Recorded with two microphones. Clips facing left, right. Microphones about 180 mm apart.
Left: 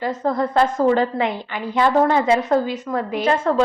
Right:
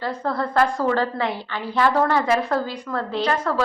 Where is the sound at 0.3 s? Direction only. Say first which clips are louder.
Left 2 dB; 20° left (ahead or behind).